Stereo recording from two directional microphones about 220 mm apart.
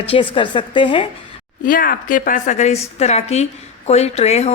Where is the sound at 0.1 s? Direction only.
20° left (ahead or behind).